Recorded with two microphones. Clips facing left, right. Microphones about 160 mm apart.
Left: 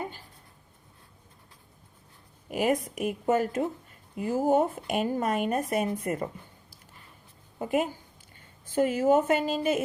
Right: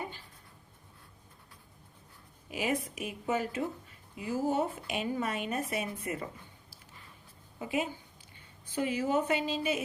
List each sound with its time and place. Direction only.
2.5 s a woman's voice: 50° left (ahead or behind)
7.6 s a woman's voice: 50° left (ahead or behind)